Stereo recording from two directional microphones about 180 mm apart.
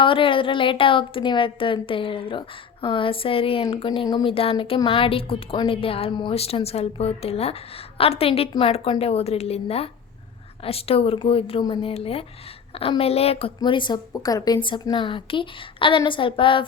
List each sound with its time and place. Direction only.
0.0 s a woman's voice: 30° left (ahead or behind)